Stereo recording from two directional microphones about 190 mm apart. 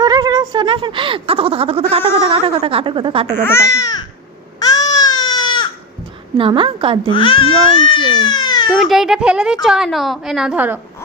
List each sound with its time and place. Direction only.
0.0 s speech: 20° right (ahead or behind)
3.3 s speech: 10° left (ahead or behind)
4.6 s baby cry: 20° left (ahead or behind)
6.3 s speech: 25° right (ahead or behind)
7.1 s speech: 25° left (ahead or behind)
8.2 s a sound: 25° left (ahead or behind)
8.7 s a woman's voice: centre (ahead or behind)